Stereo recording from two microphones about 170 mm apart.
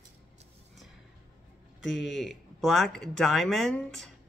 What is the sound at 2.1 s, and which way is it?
Speech, centre (ahead or behind).